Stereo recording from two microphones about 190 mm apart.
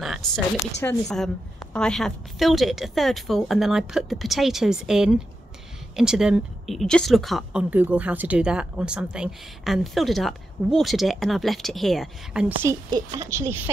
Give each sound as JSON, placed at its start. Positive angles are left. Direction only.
{"t": 0.8, "sound": "speech", "side_deg": 5}
{"t": 12.6, "sound": "speech", "side_deg": -15}